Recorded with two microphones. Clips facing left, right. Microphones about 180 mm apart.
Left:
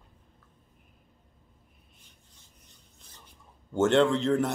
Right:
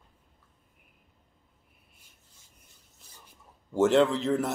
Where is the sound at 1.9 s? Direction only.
10° right (ahead or behind).